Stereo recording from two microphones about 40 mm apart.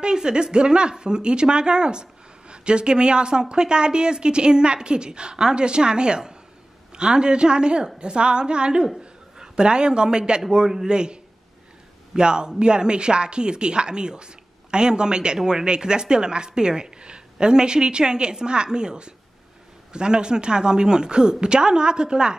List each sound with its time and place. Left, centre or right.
0.0 s speech: right
8.8 s chuckle: centre
9.6 s speech: right
12.2 s speech: right